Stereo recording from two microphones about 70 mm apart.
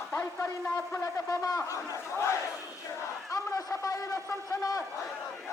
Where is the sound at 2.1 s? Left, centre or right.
Left.